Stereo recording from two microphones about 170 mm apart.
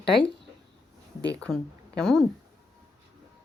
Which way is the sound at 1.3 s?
5° left (ahead or behind).